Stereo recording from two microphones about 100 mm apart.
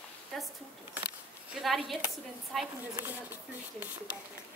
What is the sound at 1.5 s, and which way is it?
A woman's voice, 5° right (ahead or behind).